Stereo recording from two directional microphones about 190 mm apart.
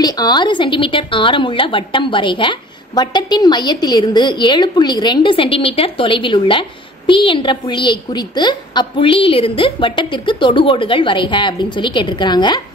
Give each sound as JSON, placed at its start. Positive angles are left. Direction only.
{"t": 0.0, "sound": "a woman's voice", "side_deg": 20}